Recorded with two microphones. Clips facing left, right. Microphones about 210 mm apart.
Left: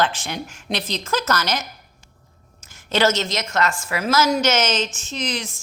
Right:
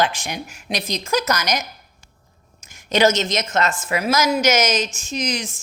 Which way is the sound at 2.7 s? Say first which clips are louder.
Right 2 dB; 15° right (ahead or behind).